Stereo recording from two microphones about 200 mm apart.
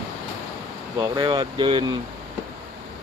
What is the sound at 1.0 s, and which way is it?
Speech, 20° right (ahead or behind).